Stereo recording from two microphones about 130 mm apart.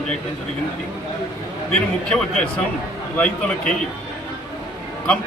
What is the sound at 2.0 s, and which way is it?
A man's voice, 5° left (ahead or behind).